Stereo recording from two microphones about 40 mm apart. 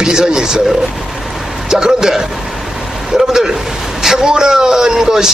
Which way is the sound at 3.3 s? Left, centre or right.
Centre.